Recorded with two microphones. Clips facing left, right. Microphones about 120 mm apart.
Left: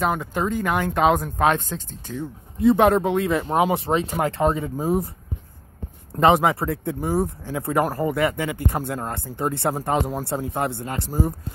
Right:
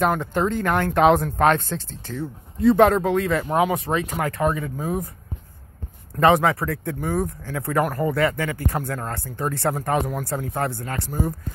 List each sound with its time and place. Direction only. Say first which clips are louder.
0.0 s speech: right 2 dB; 5° left (ahead or behind); by 5.1 s 30° left (ahead or behind)
6.1 s speech: even; 20° left (ahead or behind)